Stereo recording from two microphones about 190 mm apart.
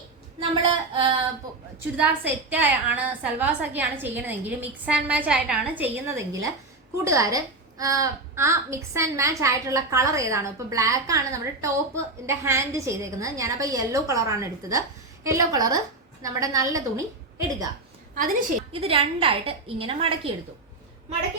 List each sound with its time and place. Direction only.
0.3 s a woman's voice: 25° right (ahead or behind)
2.0 s a woman's voice: 10° right (ahead or behind)
18.1 s a woman's voice: 45° right (ahead or behind)
18.7 s a woman's voice: 30° right (ahead or behind)